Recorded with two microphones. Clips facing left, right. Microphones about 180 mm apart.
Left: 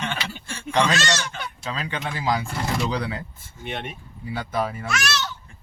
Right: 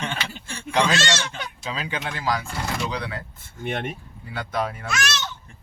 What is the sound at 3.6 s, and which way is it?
Speech, 50° right (ahead or behind).